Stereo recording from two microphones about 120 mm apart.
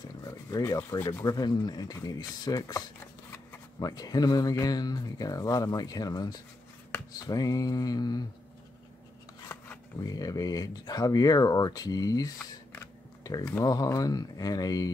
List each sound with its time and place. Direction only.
0.2 s a sound: 30° left (ahead or behind)
1.2 s speech: 35° left (ahead or behind)
3.8 s speech: 30° left (ahead or behind)
9.5 s shuffling cards: 15° left (ahead or behind)
10.0 s speech: 30° left (ahead or behind)